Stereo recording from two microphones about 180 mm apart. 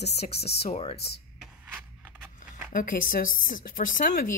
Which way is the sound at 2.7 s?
50° left (ahead or behind).